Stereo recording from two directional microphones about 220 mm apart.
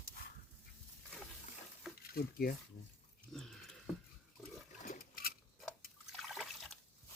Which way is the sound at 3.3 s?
Centre (ahead or behind).